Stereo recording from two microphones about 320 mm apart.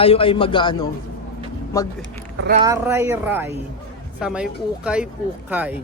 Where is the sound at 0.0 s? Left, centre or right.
Centre.